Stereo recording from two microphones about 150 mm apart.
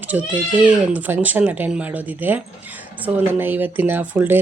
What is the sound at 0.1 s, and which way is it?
Speech, 10° right (ahead or behind).